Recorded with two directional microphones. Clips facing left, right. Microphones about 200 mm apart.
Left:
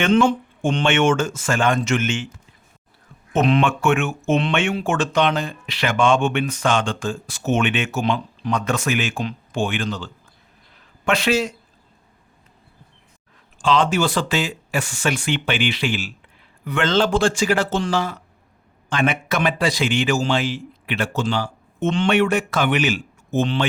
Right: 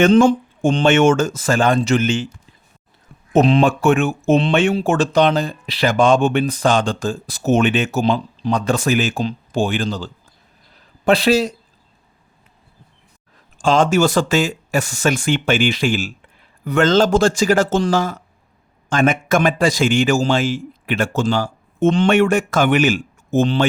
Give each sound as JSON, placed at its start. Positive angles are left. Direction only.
{"t": 0.0, "sound": "speech", "side_deg": -40}
{"t": 3.3, "sound": "speech", "side_deg": -35}
{"t": 10.8, "sound": "a sound", "side_deg": -35}
{"t": 13.6, "sound": "a man's voice", "side_deg": -45}